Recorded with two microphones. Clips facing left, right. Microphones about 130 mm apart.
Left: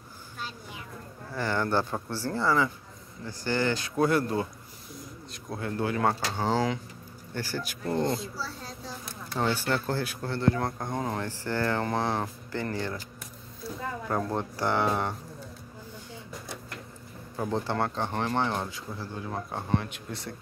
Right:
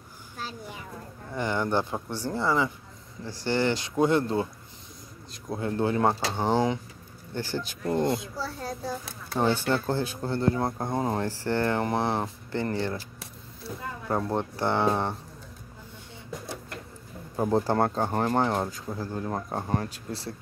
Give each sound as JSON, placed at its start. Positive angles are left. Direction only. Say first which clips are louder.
{"t": 1.3, "sound": "speech", "louder": "right 1 dB", "side_deg": -20}
{"t": 5.5, "sound": "speech", "louder": "right 4 dB", "side_deg": -25}
{"t": 8.4, "sound": "a child's voice", "louder": "right 5 dB", "side_deg": -50}
{"t": 9.4, "sound": "speech", "louder": "right 3 dB", "side_deg": -15}
{"t": 17.4, "sound": "speech", "louder": "right 5 dB", "side_deg": -40}